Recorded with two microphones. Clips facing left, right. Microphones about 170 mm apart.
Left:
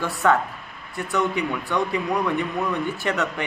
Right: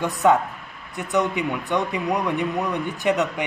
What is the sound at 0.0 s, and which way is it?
A man's voice, 20° right (ahead or behind).